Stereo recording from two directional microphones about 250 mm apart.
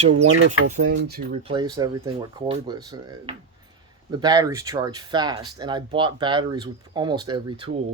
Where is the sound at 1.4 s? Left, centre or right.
Centre.